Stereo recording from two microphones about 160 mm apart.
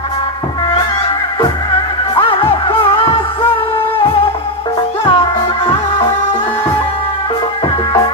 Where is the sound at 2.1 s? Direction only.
35° left (ahead or behind).